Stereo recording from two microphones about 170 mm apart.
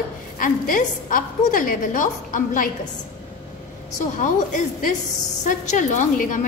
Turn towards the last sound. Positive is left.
turn(degrees=50)  # may be behind; listen again after turning